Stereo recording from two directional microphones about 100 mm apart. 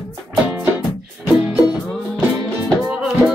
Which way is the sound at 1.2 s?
15° right (ahead or behind).